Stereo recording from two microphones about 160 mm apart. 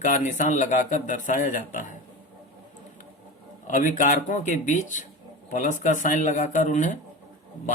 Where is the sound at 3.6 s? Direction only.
50° left (ahead or behind).